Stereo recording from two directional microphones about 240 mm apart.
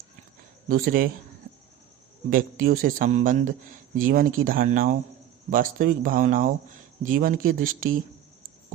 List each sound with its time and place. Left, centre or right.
0.7 s speech: right
2.3 s speech: right